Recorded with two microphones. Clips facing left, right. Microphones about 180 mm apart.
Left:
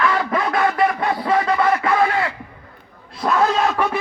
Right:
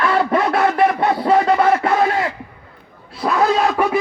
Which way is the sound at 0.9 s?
40° right (ahead or behind).